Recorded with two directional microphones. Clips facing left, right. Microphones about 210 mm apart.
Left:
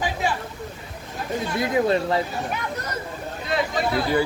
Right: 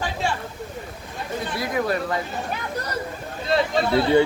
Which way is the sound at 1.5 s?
20° left (ahead or behind).